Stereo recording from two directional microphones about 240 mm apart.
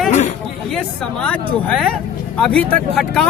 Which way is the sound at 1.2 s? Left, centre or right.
Centre.